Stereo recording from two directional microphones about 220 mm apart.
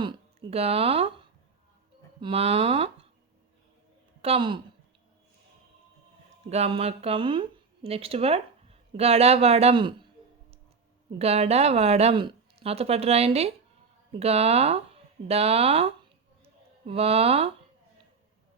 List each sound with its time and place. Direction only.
0.5 s a woman's voice: 25° right (ahead or behind)
2.2 s a woman's voice: 25° right (ahead or behind)
4.2 s speech: 25° right (ahead or behind)
6.5 s speech: 30° right (ahead or behind)
11.2 s a woman's voice: 30° right (ahead or behind)
16.4 s a sound: 25° right (ahead or behind)